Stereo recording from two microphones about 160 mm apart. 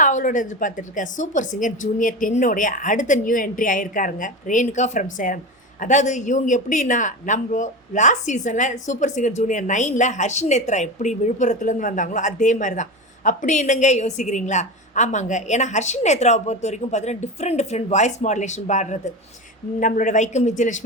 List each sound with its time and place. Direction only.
0.0 s a woman's voice: 55° left (ahead or behind)